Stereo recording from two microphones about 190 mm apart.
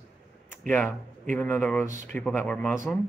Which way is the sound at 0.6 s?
10° left (ahead or behind).